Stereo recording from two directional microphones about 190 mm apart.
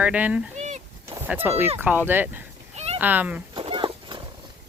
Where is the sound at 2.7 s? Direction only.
35° right (ahead or behind).